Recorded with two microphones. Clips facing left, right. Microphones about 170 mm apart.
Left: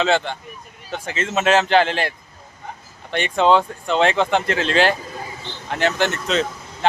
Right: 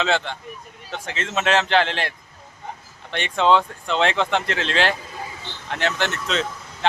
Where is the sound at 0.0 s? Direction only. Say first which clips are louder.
Left 3 dB; centre (ahead or behind).